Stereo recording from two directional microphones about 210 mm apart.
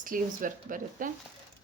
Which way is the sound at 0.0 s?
40° right (ahead or behind).